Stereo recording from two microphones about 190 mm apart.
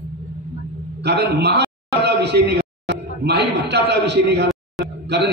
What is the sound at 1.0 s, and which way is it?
A man's voice, 60° right (ahead or behind).